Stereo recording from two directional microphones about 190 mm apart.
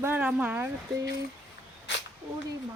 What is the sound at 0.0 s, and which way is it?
Speech, 10° right (ahead or behind).